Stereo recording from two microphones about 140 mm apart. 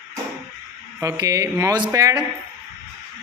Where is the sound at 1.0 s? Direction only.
25° right (ahead or behind).